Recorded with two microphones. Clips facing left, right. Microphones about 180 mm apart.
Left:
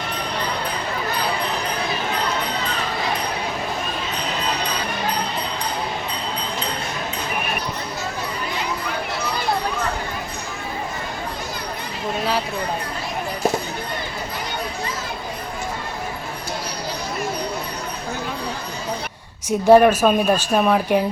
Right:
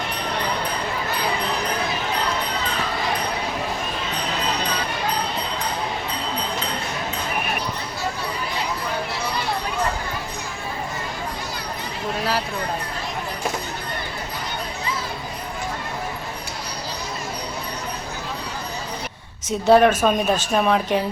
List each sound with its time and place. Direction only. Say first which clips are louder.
19.5 s a woman's voice: left 3 dB; 10° left (ahead or behind)